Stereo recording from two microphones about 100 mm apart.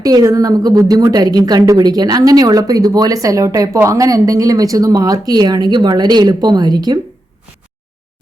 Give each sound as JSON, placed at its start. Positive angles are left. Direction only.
{"t": 0.0, "sound": "a woman's voice", "side_deg": -35}